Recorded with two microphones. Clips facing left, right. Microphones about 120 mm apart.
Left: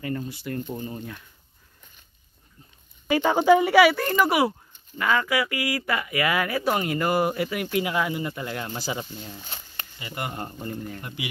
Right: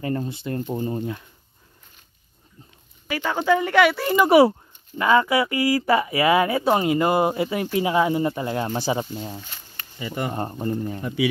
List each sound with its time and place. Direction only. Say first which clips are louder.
0.0 s speech: right 4 dB; 35° right (ahead or behind)
3.1 s speech: left 3 dB; 20° left (ahead or behind); by 4.2 s 5° right (ahead or behind)
4.3 s speech: right 8 dB; 30° right (ahead or behind)
9.1 s speech: right 6 dB; 35° right (ahead or behind)